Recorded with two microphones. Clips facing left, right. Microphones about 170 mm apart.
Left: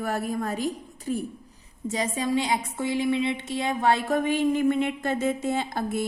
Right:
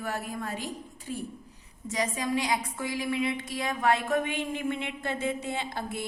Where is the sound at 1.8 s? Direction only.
30° left (ahead or behind).